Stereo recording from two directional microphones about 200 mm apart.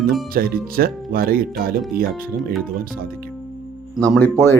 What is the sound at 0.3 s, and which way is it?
Speech, 45° right (ahead or behind).